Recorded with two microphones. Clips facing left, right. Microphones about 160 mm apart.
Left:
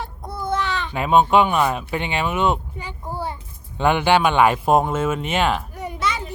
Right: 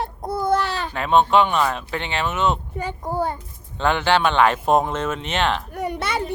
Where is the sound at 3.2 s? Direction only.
50° right (ahead or behind).